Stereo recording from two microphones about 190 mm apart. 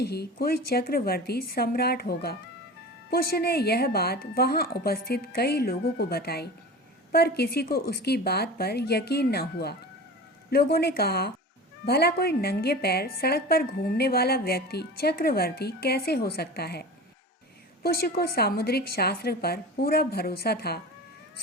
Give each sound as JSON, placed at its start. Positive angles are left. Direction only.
{"t": 0.0, "sound": "a woman's voice", "side_deg": 60}
{"t": 17.8, "sound": "a woman's voice", "side_deg": 55}